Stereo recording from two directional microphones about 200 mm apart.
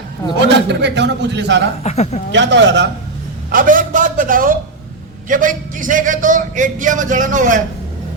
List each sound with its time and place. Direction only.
0.4 s a man's voice: 60° right (ahead or behind)
1.8 s a woman's voice: 35° left (ahead or behind)
2.3 s a man's voice: 65° right (ahead or behind)
3.5 s a sound: 45° right (ahead or behind)
5.3 s a man's voice: 40° right (ahead or behind)